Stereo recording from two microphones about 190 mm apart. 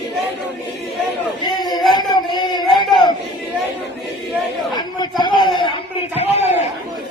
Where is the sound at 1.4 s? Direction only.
20° left (ahead or behind).